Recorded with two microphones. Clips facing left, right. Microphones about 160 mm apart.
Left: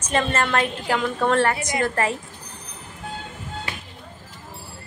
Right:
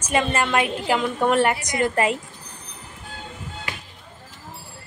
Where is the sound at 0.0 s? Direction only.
10° right (ahead or behind).